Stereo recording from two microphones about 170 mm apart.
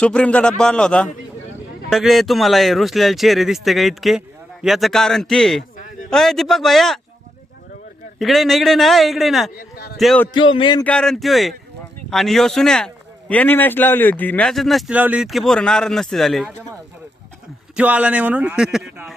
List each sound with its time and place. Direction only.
0.0 s a man's voice: 5° left (ahead or behind)
8.2 s a man's voice: centre (ahead or behind)
9.6 s speech: 65° left (ahead or behind)
10.0 s a man's voice: centre (ahead or behind)
10.3 s music: 30° left (ahead or behind)
10.8 s a man's voice: 5° left (ahead or behind)
17.7 s speech: 10° right (ahead or behind)